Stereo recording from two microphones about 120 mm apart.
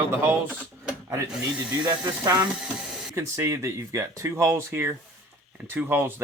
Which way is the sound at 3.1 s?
25° right (ahead or behind).